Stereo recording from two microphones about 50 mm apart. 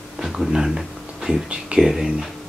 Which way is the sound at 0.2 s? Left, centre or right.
Centre.